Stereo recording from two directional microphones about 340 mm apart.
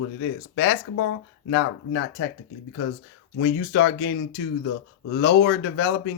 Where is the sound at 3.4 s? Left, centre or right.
Left.